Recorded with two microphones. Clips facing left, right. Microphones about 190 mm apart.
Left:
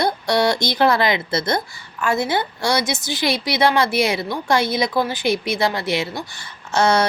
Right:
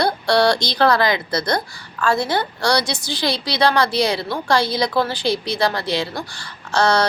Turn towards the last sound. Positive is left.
turn(degrees=25)  # may be behind; listen again after turning